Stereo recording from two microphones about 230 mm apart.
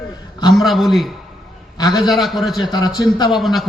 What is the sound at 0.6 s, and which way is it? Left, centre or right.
A man's voice, centre.